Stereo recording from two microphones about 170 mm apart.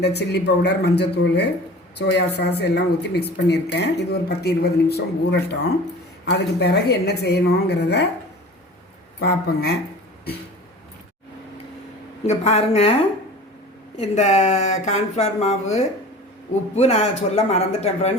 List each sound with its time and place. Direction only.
0.0 s speech: 75° left (ahead or behind)
9.2 s speech: 70° left (ahead or behind)
12.2 s speech: 40° left (ahead or behind)
14.0 s speech: 45° left (ahead or behind)